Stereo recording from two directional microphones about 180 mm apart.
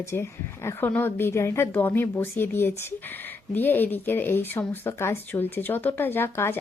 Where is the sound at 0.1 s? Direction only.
15° left (ahead or behind).